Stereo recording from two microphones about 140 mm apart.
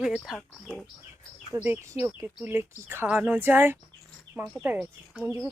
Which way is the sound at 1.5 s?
15° right (ahead or behind).